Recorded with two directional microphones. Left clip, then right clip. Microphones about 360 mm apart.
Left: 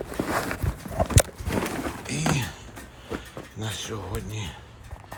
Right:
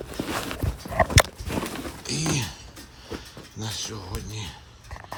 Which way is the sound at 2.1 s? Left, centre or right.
Centre.